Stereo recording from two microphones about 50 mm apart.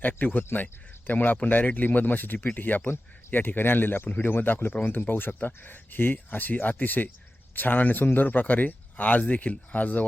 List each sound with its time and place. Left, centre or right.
0.0 s speech: left